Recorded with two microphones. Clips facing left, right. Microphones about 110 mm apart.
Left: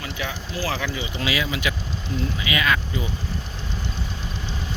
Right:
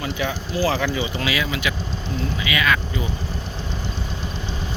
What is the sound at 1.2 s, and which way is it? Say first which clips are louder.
Speech: right 1 dB; 25° left (ahead or behind).